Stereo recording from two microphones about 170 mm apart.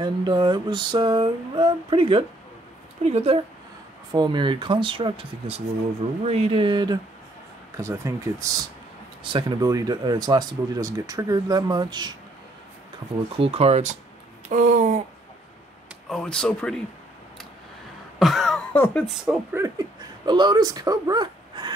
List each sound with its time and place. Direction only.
0.0 s speech: 25° right (ahead or behind)
7.7 s speech: 15° right (ahead or behind)
13.4 s speech: 35° right (ahead or behind)
14.5 s a sound: 45° right (ahead or behind)
16.1 s speech: 5° left (ahead or behind)
18.2 s a sound: centre (ahead or behind)
19.0 s speech: centre (ahead or behind)
19.5 s speech: 20° right (ahead or behind)